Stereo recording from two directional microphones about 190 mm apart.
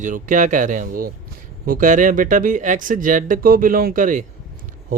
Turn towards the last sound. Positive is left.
turn(degrees=-45)  # may be behind; listen again after turning